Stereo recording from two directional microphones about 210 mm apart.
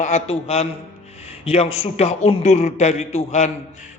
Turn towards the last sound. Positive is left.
turn(degrees=35)  # may be behind; listen again after turning